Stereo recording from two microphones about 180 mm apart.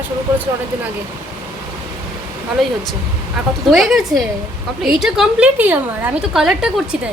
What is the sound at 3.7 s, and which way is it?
A woman's voice, 5° right (ahead or behind).